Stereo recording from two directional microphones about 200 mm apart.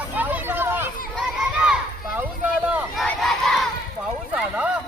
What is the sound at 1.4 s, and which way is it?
Children playing, 5° right (ahead or behind).